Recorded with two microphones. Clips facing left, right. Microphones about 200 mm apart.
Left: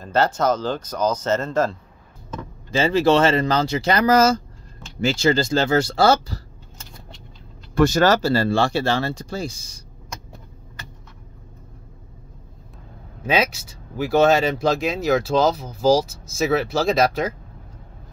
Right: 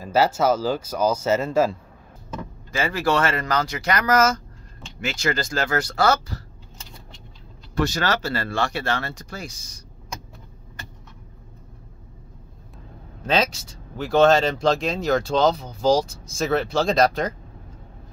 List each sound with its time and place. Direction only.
0.0 s speech: 5° right (ahead or behind)
2.7 s speech: 25° left (ahead or behind)
7.7 s speech: 50° left (ahead or behind); by 9.8 s 30° left (ahead or behind)
13.2 s speech: 10° left (ahead or behind)